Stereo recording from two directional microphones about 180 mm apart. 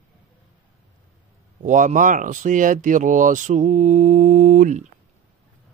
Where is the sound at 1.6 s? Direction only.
45° right (ahead or behind).